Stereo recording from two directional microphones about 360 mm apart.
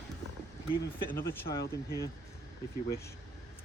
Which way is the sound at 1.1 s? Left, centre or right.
Centre.